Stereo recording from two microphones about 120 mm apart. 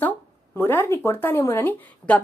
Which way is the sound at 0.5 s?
20° left (ahead or behind).